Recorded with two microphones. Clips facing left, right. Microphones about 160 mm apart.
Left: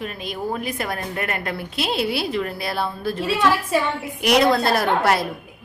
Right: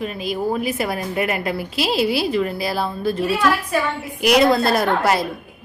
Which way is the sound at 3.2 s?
25° left (ahead or behind).